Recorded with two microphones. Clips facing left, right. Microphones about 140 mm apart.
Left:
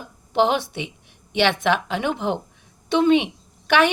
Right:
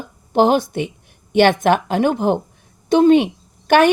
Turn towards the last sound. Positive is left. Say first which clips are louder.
# right 6 dB
turn(degrees=-45)  # may be behind; listen again after turning